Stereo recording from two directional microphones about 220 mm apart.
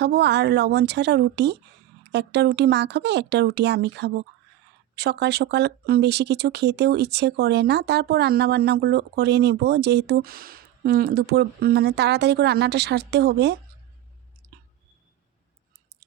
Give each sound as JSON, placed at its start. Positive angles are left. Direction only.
{"t": 0.0, "sound": "speech", "side_deg": -50}